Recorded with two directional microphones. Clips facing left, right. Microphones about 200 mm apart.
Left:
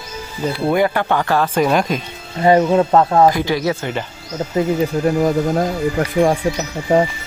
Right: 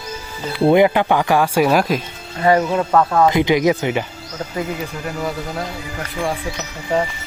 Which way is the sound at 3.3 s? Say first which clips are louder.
Right 3 dB; 20° right (ahead or behind).